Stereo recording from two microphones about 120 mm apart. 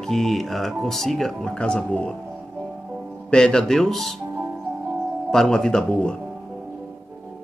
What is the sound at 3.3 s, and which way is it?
Speech, 5° left (ahead or behind).